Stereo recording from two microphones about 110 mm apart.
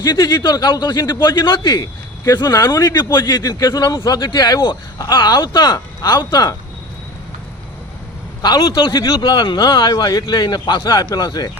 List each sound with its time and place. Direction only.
0.0 s speech: 40° left (ahead or behind)
8.4 s speech: 35° left (ahead or behind)
8.7 s speech: 45° left (ahead or behind)
9.9 s speech: 35° left (ahead or behind)